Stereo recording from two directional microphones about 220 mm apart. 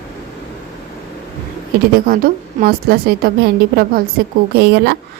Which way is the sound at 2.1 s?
40° right (ahead or behind).